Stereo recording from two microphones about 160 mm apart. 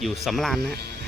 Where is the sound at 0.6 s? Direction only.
80° right.